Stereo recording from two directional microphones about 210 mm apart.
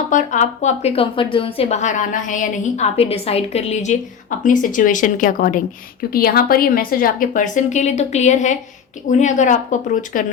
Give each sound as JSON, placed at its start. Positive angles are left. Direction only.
{"t": 0.1, "sound": "a woman's voice", "side_deg": 35}